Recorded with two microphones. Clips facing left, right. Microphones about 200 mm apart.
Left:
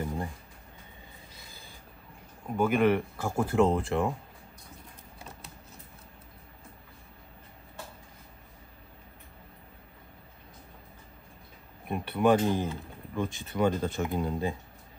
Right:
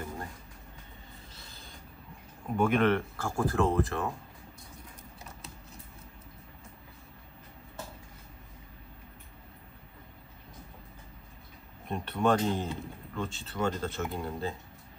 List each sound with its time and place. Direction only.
1.3 s filing: 15° left (ahead or behind)
2.4 s speech: 5° left (ahead or behind); by 4.1 s 20° left (ahead or behind)
11.9 s speech: 10° left (ahead or behind)